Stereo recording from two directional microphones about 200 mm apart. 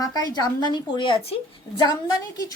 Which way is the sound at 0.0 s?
20° left (ahead or behind).